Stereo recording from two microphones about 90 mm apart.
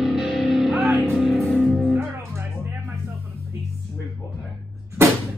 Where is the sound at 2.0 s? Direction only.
30° right (ahead or behind).